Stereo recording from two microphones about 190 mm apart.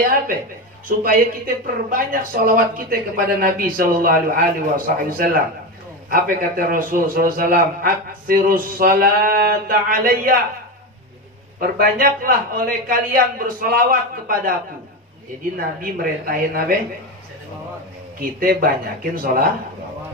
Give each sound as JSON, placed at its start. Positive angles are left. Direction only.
{"t": 0.0, "sound": "a woman's voice", "side_deg": -45}
{"t": 11.8, "sound": "speech", "side_deg": -50}
{"t": 15.5, "sound": "speech", "side_deg": -50}
{"t": 18.4, "sound": "speech", "side_deg": -50}